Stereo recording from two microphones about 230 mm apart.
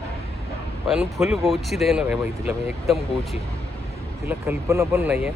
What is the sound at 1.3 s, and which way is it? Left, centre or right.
Speech, centre.